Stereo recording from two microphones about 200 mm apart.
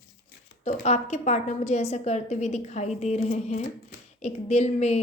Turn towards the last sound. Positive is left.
turn(degrees=35)  # may be behind; listen again after turning